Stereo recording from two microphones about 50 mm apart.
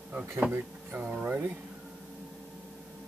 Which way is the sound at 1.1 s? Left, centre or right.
Right.